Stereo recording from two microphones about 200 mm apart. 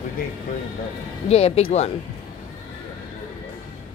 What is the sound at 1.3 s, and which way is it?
Speech, 30° left (ahead or behind).